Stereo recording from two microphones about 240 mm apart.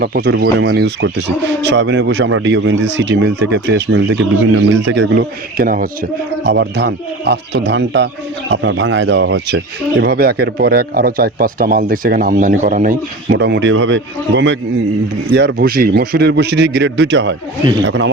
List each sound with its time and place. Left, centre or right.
0.0 s speech: right